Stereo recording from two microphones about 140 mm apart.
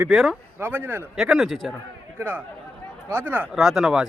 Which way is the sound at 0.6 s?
15° right (ahead or behind).